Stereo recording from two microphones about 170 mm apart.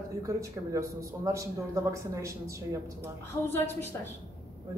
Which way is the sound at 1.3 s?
20° right (ahead or behind).